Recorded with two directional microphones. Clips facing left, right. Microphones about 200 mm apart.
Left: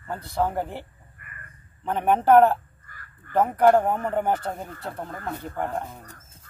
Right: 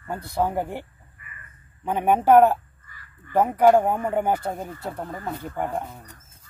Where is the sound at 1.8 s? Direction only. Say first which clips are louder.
Right 1 dB; 10° right (ahead or behind).